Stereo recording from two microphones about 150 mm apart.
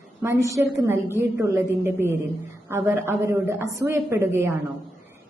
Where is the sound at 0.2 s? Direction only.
20° right (ahead or behind).